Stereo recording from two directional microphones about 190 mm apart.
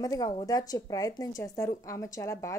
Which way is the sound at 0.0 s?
20° left (ahead or behind).